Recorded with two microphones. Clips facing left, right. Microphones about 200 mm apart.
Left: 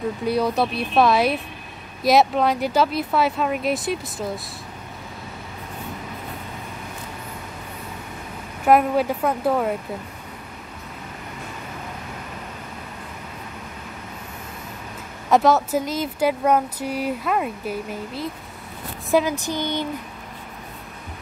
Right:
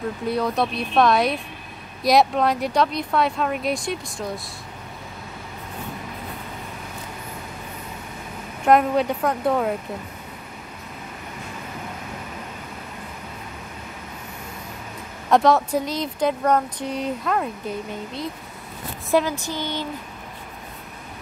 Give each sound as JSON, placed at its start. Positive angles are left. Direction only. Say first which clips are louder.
{"t": 0.3, "sound": "speech", "louder": "left 2 dB", "side_deg": 0}
{"t": 8.6, "sound": "speech", "louder": "even", "side_deg": 5}
{"t": 15.2, "sound": "speech", "louder": "even", "side_deg": 0}
{"t": 19.2, "sound": "a sound", "louder": "left 3 dB", "side_deg": 15}